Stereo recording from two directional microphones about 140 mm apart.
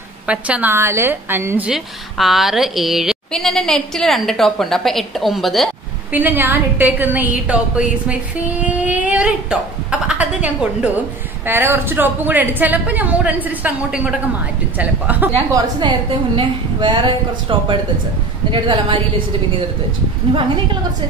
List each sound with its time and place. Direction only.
0.3 s a woman's voice: 10° right (ahead or behind)
1.7 s a woman's voice: centre (ahead or behind)
6.1 s a woman's voice: 15° right (ahead or behind)
15.5 s a woman's voice: 35° right (ahead or behind)